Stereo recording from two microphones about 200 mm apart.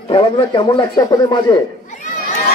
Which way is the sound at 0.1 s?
25° left (ahead or behind).